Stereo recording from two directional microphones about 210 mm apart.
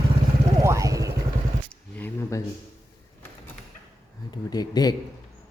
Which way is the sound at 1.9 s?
10° left (ahead or behind).